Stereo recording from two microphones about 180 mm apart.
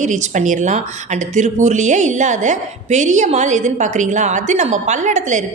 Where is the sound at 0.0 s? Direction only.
45° right (ahead or behind).